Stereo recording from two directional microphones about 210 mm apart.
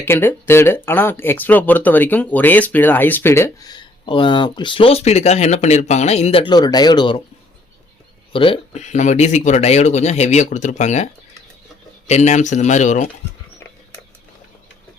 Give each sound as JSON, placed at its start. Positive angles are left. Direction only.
{"t": 0.0, "sound": "speech", "side_deg": 10}
{"t": 8.3, "sound": "speech", "side_deg": 25}